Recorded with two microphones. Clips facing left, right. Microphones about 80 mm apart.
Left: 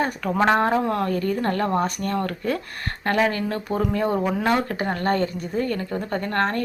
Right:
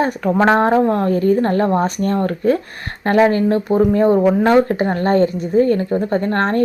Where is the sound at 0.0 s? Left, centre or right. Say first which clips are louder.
Right 6 dB; right.